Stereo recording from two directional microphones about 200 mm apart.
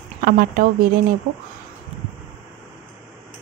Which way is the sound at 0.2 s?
45° right (ahead or behind).